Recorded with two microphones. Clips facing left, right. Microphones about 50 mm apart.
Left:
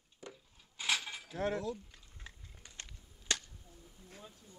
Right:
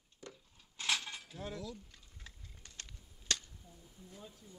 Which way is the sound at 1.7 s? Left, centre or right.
Centre.